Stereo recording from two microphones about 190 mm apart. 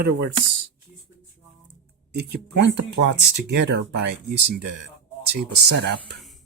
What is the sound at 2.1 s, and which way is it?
Speech, 65° right (ahead or behind).